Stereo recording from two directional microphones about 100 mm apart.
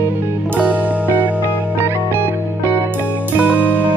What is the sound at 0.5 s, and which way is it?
Music, 15° right (ahead or behind).